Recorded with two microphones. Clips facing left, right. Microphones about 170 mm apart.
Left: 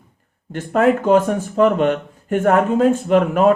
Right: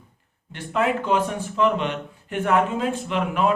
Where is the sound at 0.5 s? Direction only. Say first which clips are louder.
Left 7 dB; 45° left (ahead or behind).